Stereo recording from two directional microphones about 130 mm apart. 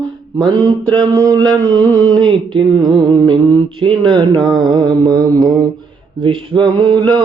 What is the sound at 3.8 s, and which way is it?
Mantra, 40° right (ahead or behind).